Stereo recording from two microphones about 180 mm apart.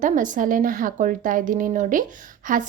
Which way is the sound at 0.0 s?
45° right (ahead or behind).